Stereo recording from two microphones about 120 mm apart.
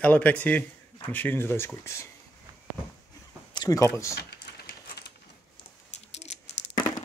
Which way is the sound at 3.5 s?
30° left (ahead or behind).